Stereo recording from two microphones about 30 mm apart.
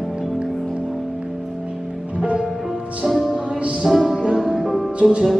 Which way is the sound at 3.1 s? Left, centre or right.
Centre.